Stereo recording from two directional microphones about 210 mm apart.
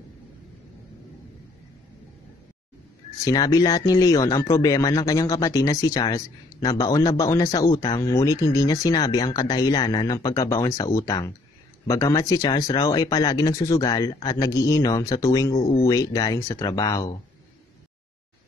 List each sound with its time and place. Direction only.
3.3 s speech: 15° left (ahead or behind)